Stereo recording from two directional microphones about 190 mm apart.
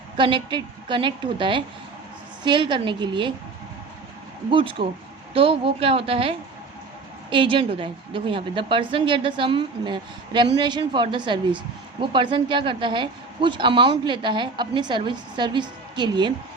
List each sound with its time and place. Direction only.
0.2 s a woman's voice: 25° right (ahead or behind)
4.5 s a woman's voice: 25° right (ahead or behind)